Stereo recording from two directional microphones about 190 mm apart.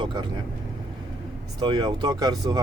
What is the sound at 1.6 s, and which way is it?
Speech, 25° right (ahead or behind).